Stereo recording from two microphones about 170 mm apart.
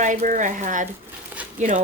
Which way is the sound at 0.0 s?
45° right (ahead or behind).